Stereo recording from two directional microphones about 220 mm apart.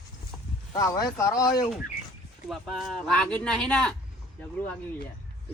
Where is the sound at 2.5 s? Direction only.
Centre (ahead or behind).